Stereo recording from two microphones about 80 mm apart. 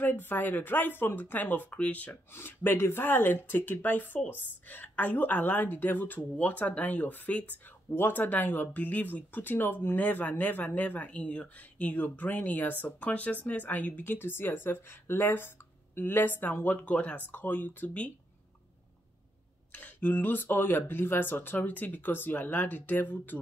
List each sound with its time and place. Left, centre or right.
0.0 s a woman's voice: left
19.7 s a woman's voice: left